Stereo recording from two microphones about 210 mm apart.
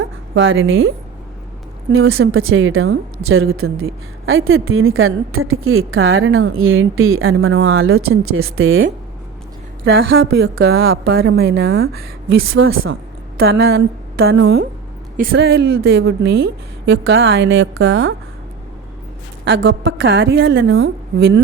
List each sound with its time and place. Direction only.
0.3 s a woman's voice: 65° right (ahead or behind)
1.9 s speech: 75° right (ahead or behind)
9.8 s a woman's voice: 50° right (ahead or behind)
12.6 s speech: 75° right (ahead or behind)
13.3 s a sound: 50° right (ahead or behind)
14.4 s a woman's voice: 50° right (ahead or behind)
19.5 s a woman's voice: 60° right (ahead or behind)